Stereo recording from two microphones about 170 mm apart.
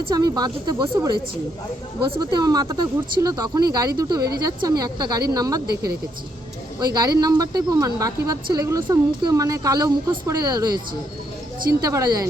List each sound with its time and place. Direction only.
0.1 s speech: 20° right (ahead or behind)
2.1 s speech: 25° right (ahead or behind)
5.6 s speech: 65° right (ahead or behind)
6.7 s speech: 25° right (ahead or behind)
11.8 s speech: 20° right (ahead or behind)